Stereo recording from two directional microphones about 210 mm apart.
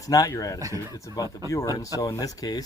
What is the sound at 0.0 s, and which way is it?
Speech, 15° left (ahead or behind).